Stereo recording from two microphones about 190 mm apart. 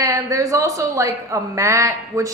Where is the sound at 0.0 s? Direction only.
15° right (ahead or behind).